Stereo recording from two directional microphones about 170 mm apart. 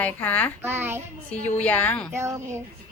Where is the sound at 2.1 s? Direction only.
15° right (ahead or behind).